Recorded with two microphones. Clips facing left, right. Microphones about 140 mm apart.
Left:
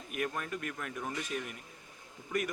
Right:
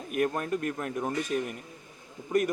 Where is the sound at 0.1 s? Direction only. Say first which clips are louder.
Right 8 dB; 45° right (ahead or behind).